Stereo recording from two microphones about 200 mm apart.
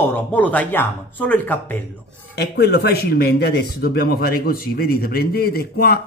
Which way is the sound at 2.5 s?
55° left (ahead or behind).